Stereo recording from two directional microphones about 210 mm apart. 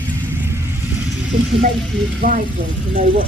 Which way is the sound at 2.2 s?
40° right (ahead or behind).